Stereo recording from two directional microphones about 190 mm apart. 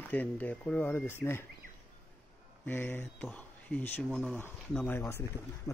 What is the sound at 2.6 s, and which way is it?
Speech, 10° left (ahead or behind).